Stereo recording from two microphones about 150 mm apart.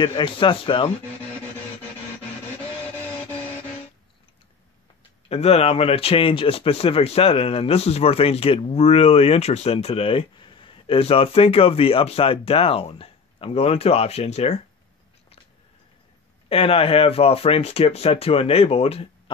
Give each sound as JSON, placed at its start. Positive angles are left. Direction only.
{"t": 0.0, "sound": "speech", "side_deg": 35}
{"t": 5.3, "sound": "speech", "side_deg": 40}
{"t": 16.4, "sound": "speech", "side_deg": 40}